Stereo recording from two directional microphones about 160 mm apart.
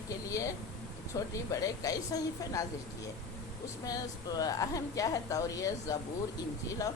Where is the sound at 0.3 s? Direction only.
20° left (ahead or behind).